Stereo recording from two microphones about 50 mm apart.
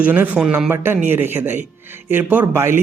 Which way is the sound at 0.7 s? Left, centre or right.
Right.